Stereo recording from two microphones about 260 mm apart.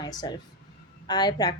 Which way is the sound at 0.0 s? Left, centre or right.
Centre.